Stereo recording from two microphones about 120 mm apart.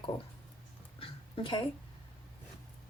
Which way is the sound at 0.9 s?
45° left (ahead or behind).